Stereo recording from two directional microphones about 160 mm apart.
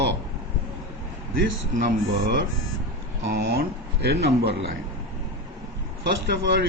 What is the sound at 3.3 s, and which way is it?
Speech, 90° right.